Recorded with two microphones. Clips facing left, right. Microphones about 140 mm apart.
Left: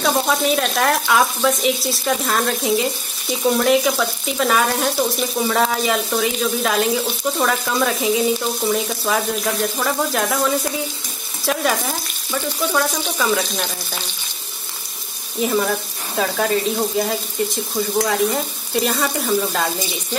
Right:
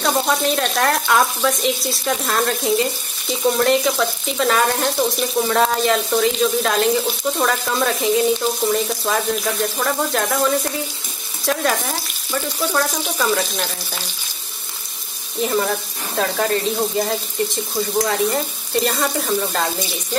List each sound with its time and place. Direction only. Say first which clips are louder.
0.0 s frying: even; centre (ahead or behind)
15.4 s frying: left 1 dB; centre (ahead or behind)